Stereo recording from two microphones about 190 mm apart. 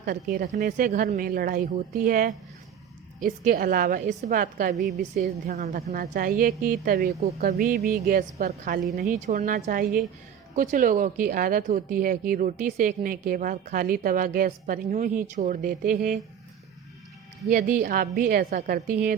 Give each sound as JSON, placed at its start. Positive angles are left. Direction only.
{"t": 0.3, "sound": "speech", "side_deg": -45}
{"t": 17.5, "sound": "speech", "side_deg": -50}